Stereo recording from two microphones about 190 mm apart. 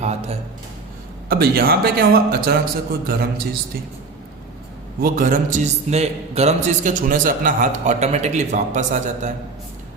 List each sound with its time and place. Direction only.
0.0 s speech: 35° right (ahead or behind)
1.3 s a man's voice: 55° right (ahead or behind)
4.9 s a man's voice: 50° right (ahead or behind)